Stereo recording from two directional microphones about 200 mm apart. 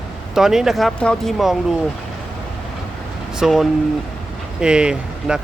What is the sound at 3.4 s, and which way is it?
Speech, centre (ahead or behind).